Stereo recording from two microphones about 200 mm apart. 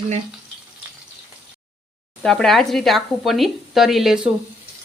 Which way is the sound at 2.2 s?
Centre (ahead or behind).